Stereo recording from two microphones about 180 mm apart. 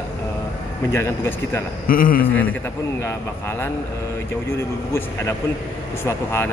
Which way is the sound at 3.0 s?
15° left (ahead or behind).